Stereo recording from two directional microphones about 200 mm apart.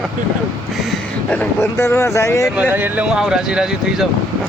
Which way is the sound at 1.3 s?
10° left (ahead or behind).